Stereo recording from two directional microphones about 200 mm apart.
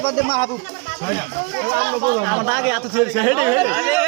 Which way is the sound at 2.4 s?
5° right (ahead or behind).